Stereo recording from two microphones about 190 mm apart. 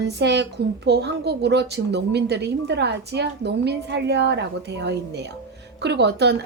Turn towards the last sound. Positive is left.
turn(degrees=-65)  # may be behind; listen again after turning